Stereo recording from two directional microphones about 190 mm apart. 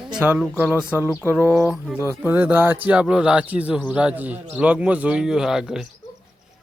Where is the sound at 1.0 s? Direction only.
15° left (ahead or behind).